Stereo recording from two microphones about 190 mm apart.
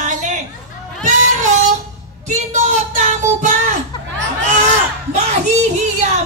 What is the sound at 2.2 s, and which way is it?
Child singing, 35° right (ahead or behind).